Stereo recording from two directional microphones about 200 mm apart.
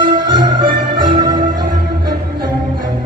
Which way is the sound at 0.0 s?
25° right (ahead or behind).